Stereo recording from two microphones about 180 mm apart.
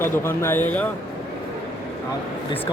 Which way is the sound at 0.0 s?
10° left (ahead or behind).